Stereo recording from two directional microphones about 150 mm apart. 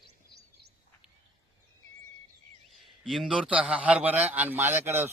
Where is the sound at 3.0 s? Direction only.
Centre (ahead or behind).